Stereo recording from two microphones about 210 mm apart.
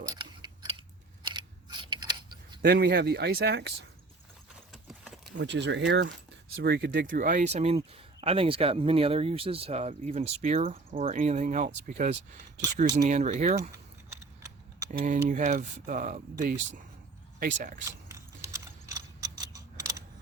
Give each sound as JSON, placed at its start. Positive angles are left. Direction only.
{"t": 0.1, "sound": "a sound", "side_deg": -20}
{"t": 1.2, "sound": "scissors", "side_deg": -20}
{"t": 2.6, "sound": "speech", "side_deg": -45}
{"t": 4.7, "sound": "clip-clop", "side_deg": 0}
{"t": 5.4, "sound": "speech", "side_deg": -55}
{"t": 14.9, "sound": "speech", "side_deg": -35}
{"t": 17.8, "sound": "mechanisms", "side_deg": -15}